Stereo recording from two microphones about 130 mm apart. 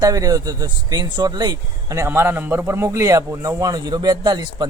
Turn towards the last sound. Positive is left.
turn(degrees=-30)  # may be behind; listen again after turning